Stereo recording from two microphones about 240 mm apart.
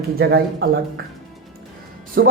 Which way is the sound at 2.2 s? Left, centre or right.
Right.